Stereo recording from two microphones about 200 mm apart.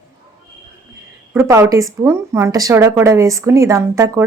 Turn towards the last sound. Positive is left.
turn(degrees=-15)  # may be behind; listen again after turning